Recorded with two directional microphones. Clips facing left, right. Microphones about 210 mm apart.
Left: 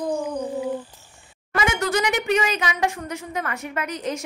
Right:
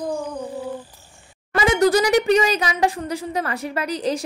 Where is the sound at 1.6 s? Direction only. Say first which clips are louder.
Right 6 dB; 35° right (ahead or behind).